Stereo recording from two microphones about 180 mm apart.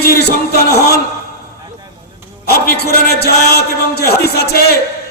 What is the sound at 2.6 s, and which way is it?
Music, 60° left (ahead or behind).